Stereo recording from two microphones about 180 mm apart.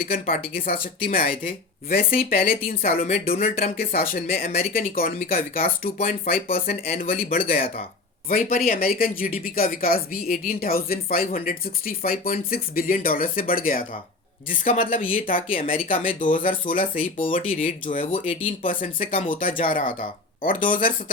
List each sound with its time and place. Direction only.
0.0 s speech: 55° left (ahead or behind)